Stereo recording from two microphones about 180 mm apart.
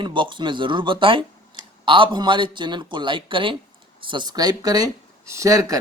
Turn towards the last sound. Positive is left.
turn(degrees=-20)  # may be behind; listen again after turning